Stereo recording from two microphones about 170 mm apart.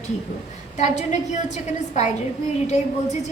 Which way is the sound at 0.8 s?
45° left (ahead or behind).